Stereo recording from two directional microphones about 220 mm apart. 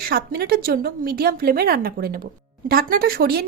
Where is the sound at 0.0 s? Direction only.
45° right (ahead or behind).